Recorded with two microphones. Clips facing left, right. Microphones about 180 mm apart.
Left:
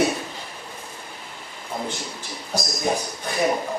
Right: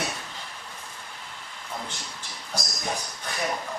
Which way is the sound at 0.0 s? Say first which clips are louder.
Left 11 dB; 10° left (ahead or behind).